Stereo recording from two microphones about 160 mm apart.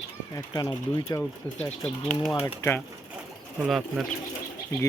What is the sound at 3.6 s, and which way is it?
Speech, 5° right (ahead or behind).